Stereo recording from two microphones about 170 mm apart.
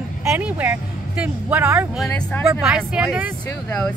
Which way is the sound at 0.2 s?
10° right (ahead or behind).